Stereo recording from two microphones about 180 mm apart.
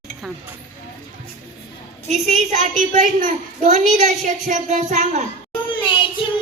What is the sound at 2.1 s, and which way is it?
A woman's voice, 45° right (ahead or behind).